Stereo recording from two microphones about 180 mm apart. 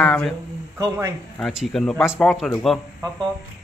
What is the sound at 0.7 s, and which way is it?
Speech, 15° right (ahead or behind).